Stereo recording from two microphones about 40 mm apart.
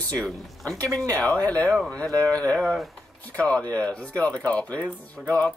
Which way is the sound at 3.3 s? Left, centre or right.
Left.